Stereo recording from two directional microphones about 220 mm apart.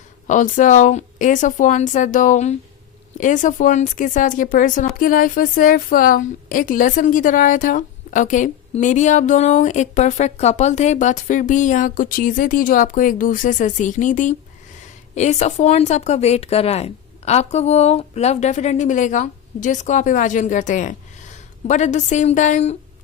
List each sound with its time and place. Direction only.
0.3 s a woman's voice: 35° left (ahead or behind)